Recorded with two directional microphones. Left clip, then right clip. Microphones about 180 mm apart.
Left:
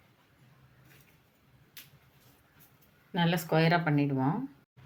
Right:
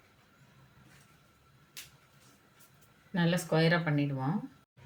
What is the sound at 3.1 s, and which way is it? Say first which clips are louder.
Speech: left 2 dB; 35° left (ahead or behind).